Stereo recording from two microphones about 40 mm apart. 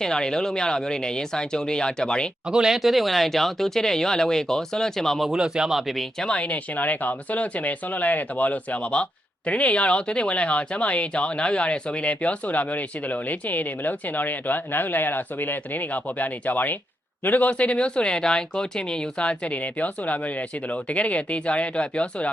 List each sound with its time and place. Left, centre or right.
0.0 s speech: centre
2.5 s speech: centre
2.7 s speech: centre
5.4 s speech: centre
6.3 s speech: left
17.5 s speech: left